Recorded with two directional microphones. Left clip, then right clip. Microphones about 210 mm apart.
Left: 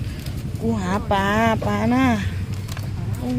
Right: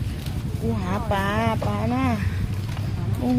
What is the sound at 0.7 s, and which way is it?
Speech, 35° left (ahead or behind).